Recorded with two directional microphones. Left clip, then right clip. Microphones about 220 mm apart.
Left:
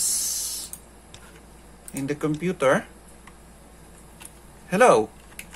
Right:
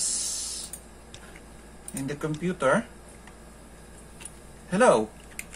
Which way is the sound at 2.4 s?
35° left (ahead or behind).